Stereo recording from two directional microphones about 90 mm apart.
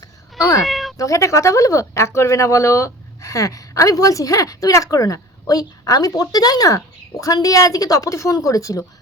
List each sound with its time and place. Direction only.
0.3 s cat: 40° left (ahead or behind)
0.6 s cat: centre (ahead or behind)
0.9 s speech: 35° left (ahead or behind)